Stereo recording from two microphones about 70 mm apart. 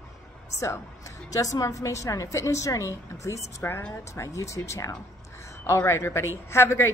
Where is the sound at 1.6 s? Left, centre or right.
Left.